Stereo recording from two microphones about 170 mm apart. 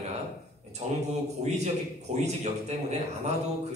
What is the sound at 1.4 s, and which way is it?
A man's voice, 40° right (ahead or behind).